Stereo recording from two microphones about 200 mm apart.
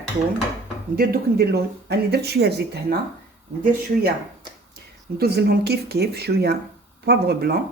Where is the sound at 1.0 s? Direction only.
55° right (ahead or behind).